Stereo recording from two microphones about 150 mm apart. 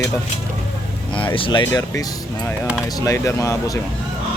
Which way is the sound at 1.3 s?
35° left (ahead or behind).